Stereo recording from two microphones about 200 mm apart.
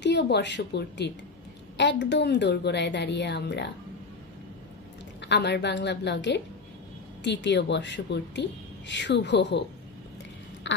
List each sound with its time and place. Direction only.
0.0 s a woman's voice: 60° left (ahead or behind)
5.2 s a woman's voice: 60° left (ahead or behind)